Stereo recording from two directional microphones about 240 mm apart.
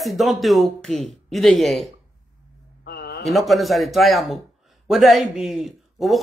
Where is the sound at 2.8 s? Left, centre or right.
Left.